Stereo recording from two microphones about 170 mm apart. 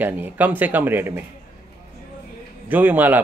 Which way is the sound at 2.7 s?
10° right (ahead or behind).